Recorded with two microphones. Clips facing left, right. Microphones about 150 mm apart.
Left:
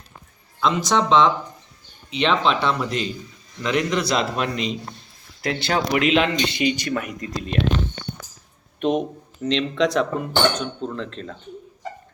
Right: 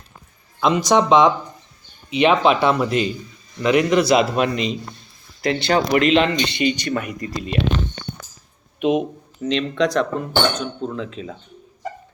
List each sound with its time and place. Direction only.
0.6 s speech: 15° right (ahead or behind)
8.8 s speech: 5° right (ahead or behind)